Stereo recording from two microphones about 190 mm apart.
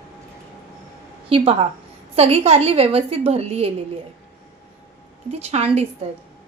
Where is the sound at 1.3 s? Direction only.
30° right (ahead or behind).